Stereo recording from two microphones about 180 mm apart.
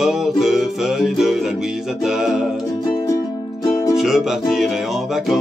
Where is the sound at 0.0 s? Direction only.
Centre (ahead or behind).